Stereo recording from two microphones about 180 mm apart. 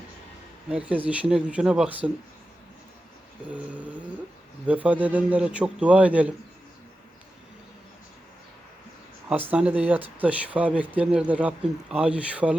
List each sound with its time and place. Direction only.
0.7 s speech: 10° right (ahead or behind)
3.4 s speech: 10° right (ahead or behind)
9.3 s speech: 10° right (ahead or behind)